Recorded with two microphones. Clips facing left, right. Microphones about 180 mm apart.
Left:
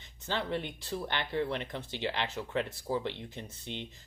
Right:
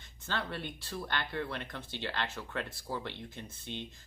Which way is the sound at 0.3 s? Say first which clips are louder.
Left 4 dB; 15° left (ahead or behind).